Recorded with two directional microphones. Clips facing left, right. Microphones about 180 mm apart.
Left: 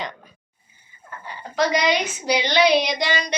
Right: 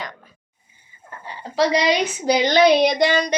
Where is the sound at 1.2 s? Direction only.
25° right (ahead or behind).